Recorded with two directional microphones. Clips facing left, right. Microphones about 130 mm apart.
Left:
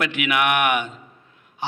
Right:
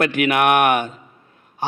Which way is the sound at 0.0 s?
45° right (ahead or behind).